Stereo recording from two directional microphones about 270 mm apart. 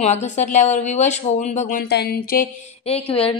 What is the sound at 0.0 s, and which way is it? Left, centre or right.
Speech, left.